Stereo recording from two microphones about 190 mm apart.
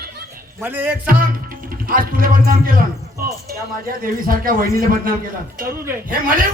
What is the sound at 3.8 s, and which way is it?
A man's voice, 50° right (ahead or behind).